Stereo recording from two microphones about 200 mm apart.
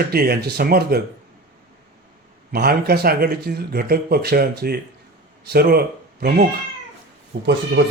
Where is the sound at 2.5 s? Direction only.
50° right (ahead or behind).